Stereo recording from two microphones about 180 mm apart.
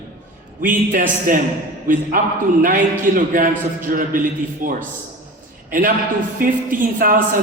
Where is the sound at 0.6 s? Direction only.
50° right (ahead or behind).